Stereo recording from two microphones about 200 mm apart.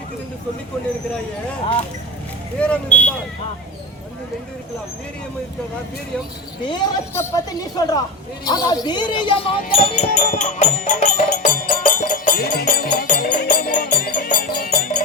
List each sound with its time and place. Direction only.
2.6 s speech: 5° left (ahead or behind)
6.7 s speech: 15° left (ahead or behind)
9.7 s music: 35° left (ahead or behind)